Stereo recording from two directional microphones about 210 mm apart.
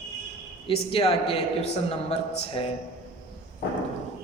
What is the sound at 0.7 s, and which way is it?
A man's voice, 25° left (ahead or behind).